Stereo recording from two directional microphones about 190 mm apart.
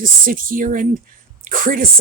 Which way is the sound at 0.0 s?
45° right (ahead or behind).